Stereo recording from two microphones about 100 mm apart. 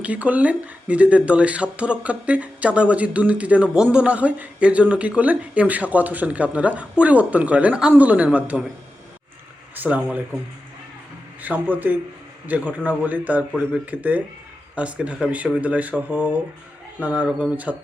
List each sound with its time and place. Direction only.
0.0 s speech: 15° right (ahead or behind)
9.7 s speech: 15° right (ahead or behind)
11.4 s speech: 15° right (ahead or behind)